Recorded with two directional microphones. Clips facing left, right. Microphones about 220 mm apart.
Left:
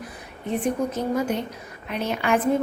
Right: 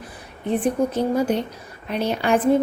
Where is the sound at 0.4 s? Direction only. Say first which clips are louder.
Right 4 dB; 30° right (ahead or behind).